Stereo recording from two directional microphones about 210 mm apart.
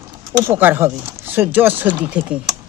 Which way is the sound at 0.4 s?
10° right (ahead or behind).